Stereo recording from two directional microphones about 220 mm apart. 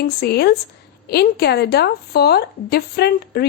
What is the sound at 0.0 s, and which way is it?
A woman's voice, 45° left (ahead or behind).